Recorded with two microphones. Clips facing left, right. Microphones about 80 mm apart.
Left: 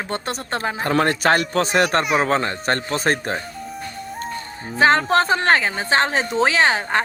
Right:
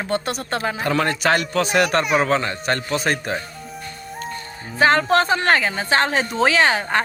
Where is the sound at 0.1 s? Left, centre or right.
Left.